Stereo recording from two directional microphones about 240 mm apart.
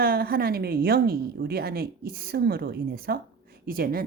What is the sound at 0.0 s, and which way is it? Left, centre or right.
A woman's voice, right.